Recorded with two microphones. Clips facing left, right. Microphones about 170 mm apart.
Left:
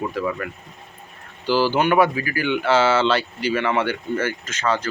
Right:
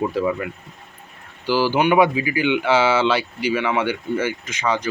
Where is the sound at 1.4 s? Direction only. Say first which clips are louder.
Right 1 dB; 15° right (ahead or behind).